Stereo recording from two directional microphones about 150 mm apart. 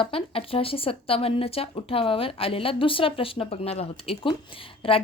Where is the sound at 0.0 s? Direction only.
40° left (ahead or behind).